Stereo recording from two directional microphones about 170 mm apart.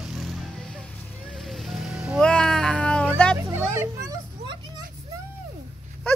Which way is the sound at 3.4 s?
15° right (ahead or behind).